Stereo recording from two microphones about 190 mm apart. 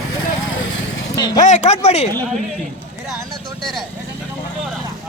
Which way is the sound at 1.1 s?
20° left (ahead or behind).